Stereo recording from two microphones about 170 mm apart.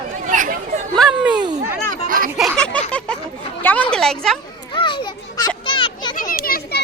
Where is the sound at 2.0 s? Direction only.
55° right (ahead or behind).